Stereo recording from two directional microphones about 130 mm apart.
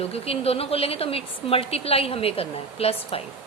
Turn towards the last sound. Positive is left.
turn(degrees=50)  # may be behind; listen again after turning